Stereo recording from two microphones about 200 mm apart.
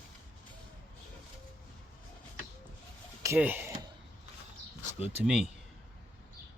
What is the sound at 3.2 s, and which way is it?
Speech, 10° right (ahead or behind).